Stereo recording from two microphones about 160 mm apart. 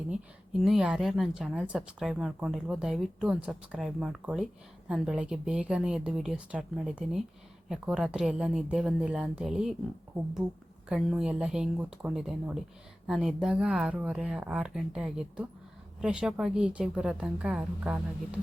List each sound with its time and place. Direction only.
0.1 s a woman's voice: centre (ahead or behind)
10.8 s a woman's voice: 5° right (ahead or behind)